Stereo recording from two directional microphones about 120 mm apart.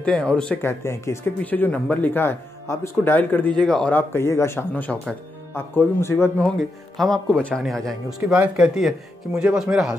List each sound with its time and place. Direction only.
0.0 s speech: 10° left (ahead or behind)
0.7 s speech: 20° left (ahead or behind)
4.1 s speech: 20° left (ahead or behind)
7.0 s speech: 5° left (ahead or behind)